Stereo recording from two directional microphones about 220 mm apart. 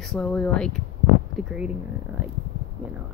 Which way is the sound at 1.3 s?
5° right (ahead or behind).